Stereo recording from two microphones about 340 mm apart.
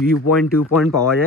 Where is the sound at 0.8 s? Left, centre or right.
Centre.